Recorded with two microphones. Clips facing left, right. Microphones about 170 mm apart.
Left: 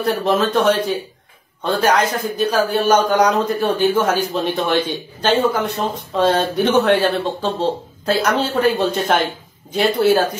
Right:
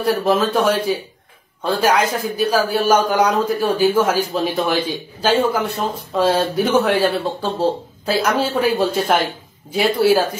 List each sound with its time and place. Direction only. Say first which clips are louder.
0.0 s speech: right 1 dB; 5° right (ahead or behind)